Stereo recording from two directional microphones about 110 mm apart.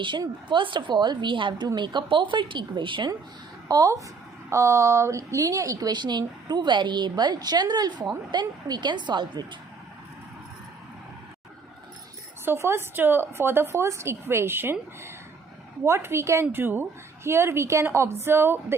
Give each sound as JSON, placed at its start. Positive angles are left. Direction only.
{"t": 0.0, "sound": "a woman's voice", "side_deg": -45}
{"t": 3.7, "sound": "a woman's voice", "side_deg": -35}
{"t": 12.5, "sound": "a woman's voice", "side_deg": -25}